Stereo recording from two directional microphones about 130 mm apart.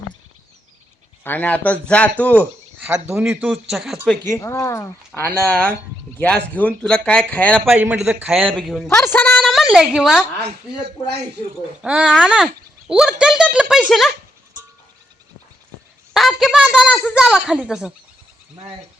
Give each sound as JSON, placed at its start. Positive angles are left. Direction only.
{"t": 1.2, "sound": "speech", "side_deg": 15}
{"t": 2.4, "sound": "speech", "side_deg": -10}
{"t": 4.3, "sound": "speech", "side_deg": 20}
{"t": 7.7, "sound": "speech", "side_deg": -10}
{"t": 8.5, "sound": "speech", "side_deg": 0}
{"t": 9.1, "sound": "speech", "side_deg": 15}
{"t": 9.4, "sound": "a woman's voice", "side_deg": 0}
{"t": 11.8, "sound": "speech", "side_deg": -10}
{"t": 16.1, "sound": "speech", "side_deg": 0}
{"t": 16.9, "sound": "speech", "side_deg": 10}
{"t": 17.2, "sound": "speech", "side_deg": -5}